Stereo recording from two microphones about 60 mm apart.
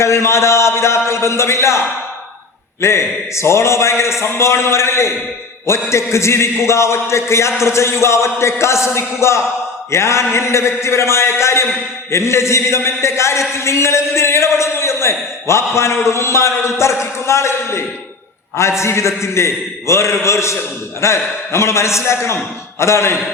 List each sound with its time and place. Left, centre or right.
0.0 s a man's voice: left
2.8 s a man's voice: left